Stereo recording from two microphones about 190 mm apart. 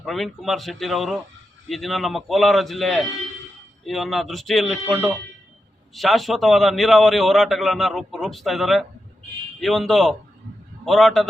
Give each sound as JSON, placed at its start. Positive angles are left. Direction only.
{"t": 0.0, "sound": "a man's voice", "side_deg": 0}